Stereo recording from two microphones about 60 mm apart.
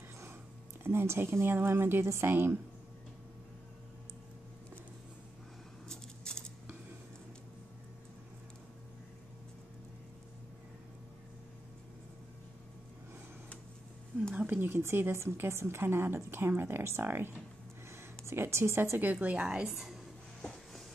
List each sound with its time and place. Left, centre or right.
0.8 s a woman's voice: right
5.9 s a sound: centre
14.3 s a woman's voice: right
17.8 s a sound: right
19.1 s a woman's voice: centre
19.7 s speech: centre